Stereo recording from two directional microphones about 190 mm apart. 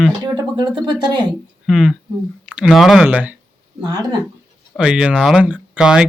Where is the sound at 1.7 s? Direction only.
Centre (ahead or behind).